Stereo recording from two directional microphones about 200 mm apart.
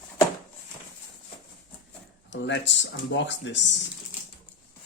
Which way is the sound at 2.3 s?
65° left (ahead or behind).